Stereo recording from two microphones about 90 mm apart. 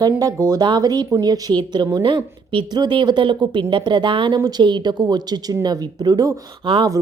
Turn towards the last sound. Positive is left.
turn(degrees=-60)  # may be behind; listen again after turning